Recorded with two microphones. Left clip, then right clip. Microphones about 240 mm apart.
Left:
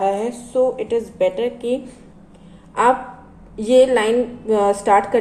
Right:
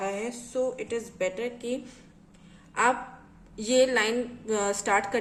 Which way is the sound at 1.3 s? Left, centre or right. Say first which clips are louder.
Left 11 dB; right.